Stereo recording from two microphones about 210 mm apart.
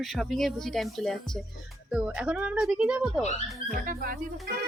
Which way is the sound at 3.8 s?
40° right (ahead or behind).